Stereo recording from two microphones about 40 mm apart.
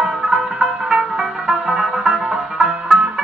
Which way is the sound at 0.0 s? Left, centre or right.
Right.